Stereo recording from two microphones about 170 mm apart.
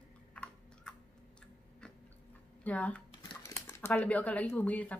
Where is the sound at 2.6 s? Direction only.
10° left (ahead or behind).